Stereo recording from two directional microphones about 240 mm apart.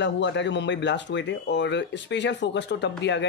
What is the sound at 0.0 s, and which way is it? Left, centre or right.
Speech, left.